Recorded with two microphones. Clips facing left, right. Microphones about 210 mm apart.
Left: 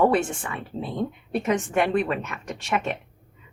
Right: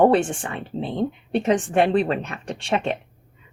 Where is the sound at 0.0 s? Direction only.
30° right (ahead or behind).